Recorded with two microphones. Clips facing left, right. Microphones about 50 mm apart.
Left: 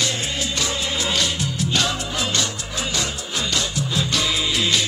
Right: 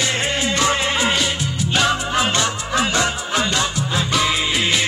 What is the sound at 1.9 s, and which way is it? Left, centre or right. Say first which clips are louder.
Music: right 6 dB; right.